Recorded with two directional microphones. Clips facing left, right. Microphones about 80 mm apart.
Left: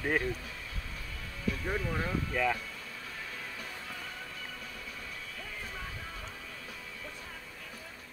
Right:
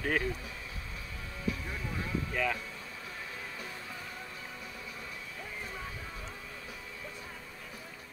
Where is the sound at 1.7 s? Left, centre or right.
Left.